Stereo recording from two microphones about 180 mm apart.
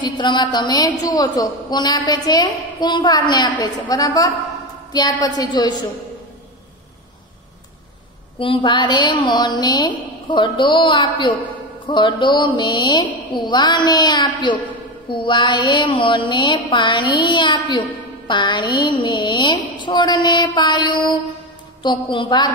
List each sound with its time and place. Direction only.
0.0 s mantra: 25° left (ahead or behind)
8.4 s mantra: 25° left (ahead or behind)